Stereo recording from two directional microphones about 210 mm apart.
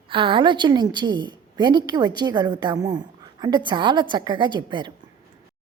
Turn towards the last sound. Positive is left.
turn(degrees=-20)  # may be behind; listen again after turning